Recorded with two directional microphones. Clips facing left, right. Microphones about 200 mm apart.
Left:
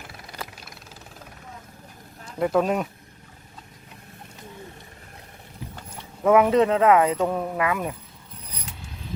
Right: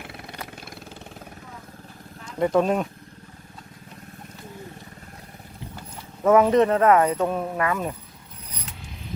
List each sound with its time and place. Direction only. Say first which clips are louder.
2.4 s speech: right 1 dB; 5° left (ahead or behind)
6.3 s speech: right 1 dB; 10° left (ahead or behind)
7.3 s speech: even; 15° right (ahead or behind)
7.5 s speech: even; 10° left (ahead or behind)